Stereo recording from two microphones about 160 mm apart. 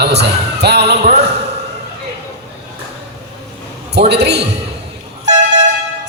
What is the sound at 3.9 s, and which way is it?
Speech, 90° right.